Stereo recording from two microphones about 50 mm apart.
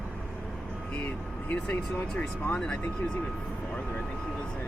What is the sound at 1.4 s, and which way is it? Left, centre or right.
Speech, left.